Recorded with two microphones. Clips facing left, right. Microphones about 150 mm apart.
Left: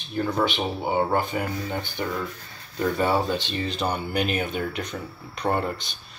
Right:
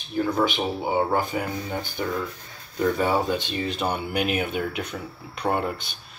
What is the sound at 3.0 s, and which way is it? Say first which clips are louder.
Speech: even; 10° right (ahead or behind).